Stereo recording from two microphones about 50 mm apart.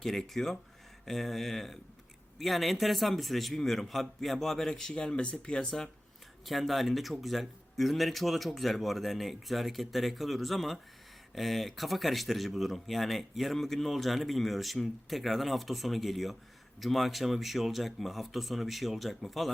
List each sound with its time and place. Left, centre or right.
0.0 s speech: centre
6.4 s speech: centre